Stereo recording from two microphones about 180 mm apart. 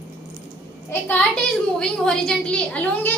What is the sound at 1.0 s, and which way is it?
A woman's voice, 5° left (ahead or behind).